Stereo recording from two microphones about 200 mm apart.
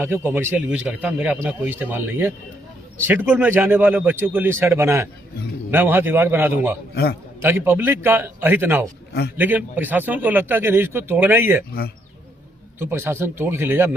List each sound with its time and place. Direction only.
0.0 s speech: 10° right (ahead or behind)
6.9 s a man's voice: 55° left (ahead or behind)
7.4 s speech: 10° right (ahead or behind)
12.8 s speech: 10° right (ahead or behind)